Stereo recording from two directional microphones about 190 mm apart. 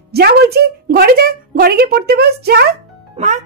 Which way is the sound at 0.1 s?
55° right (ahead or behind).